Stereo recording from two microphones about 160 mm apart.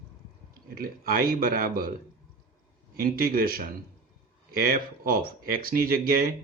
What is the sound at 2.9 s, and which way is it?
Speech, 65° right (ahead or behind).